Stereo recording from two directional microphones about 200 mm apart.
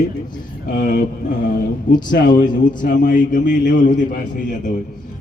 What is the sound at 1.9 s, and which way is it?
A man's voice, 40° left (ahead or behind).